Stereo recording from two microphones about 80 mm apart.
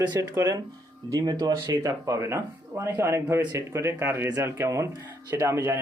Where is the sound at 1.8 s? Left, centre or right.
Right.